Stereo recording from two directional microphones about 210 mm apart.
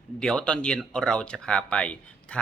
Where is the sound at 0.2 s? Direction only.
5° left (ahead or behind).